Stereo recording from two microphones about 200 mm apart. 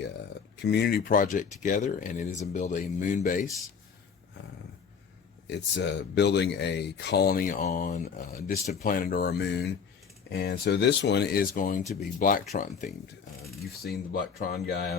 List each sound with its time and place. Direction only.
0.5 s speech: 60° left (ahead or behind); by 3.4 s 40° left (ahead or behind)
5.5 s speech: 60° left (ahead or behind); by 12.9 s 40° left (ahead or behind)
13.8 s speech: 50° left (ahead or behind)